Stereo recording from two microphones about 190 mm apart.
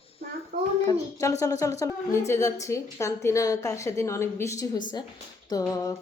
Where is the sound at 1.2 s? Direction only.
15° left (ahead or behind).